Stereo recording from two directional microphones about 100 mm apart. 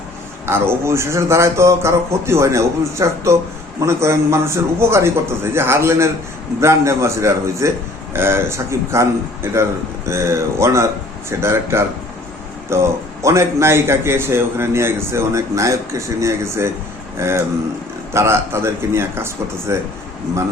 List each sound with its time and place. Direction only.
0.4 s a man's voice: 25° right (ahead or behind)